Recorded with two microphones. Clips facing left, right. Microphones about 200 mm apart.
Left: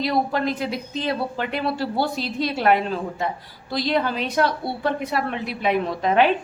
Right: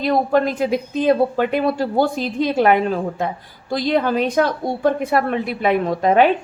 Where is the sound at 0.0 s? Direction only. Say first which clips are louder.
Right 5 dB; 50° right (ahead or behind).